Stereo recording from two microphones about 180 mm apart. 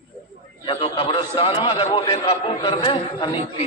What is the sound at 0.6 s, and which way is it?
A man's voice, 30° left (ahead or behind).